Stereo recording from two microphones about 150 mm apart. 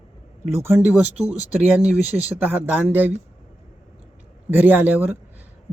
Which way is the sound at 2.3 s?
10° right (ahead or behind).